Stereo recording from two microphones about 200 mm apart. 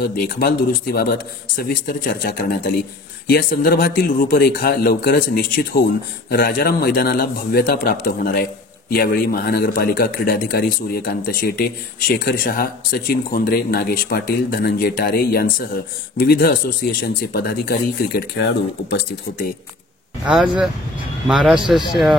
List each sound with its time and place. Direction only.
0.0 s speech: 45° left (ahead or behind)
20.2 s a man's voice: 5° right (ahead or behind)